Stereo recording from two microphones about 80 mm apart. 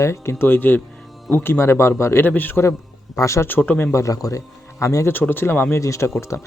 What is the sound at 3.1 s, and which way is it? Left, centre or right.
Speech, left.